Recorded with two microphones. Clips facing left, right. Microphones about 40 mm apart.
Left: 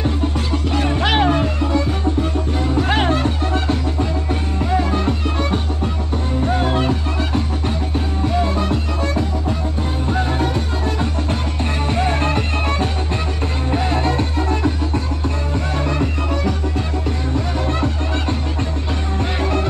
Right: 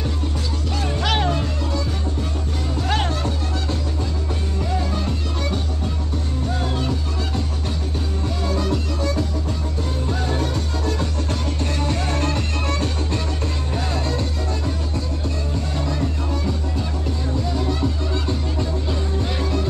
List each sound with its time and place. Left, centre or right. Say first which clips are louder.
0.7 s music: left 5 dB; left
11.9 s music: left 7 dB; left
19.1 s music: left 6 dB; left